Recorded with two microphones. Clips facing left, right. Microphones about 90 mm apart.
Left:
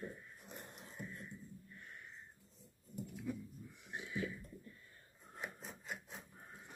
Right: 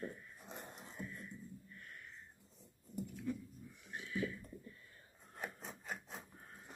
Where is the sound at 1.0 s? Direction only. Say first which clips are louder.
Even; 20° left (ahead or behind).